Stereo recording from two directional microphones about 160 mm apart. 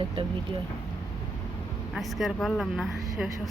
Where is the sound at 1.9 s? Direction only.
Centre (ahead or behind).